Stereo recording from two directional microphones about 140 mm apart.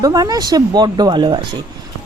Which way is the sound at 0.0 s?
25° right (ahead or behind).